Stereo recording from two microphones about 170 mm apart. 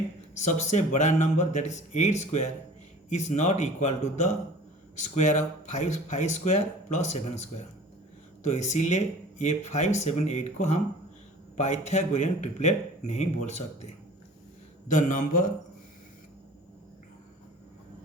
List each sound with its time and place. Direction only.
0.3 s speech: 45° left (ahead or behind)